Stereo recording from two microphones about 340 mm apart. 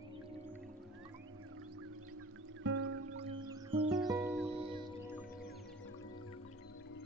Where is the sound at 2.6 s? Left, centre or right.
Right.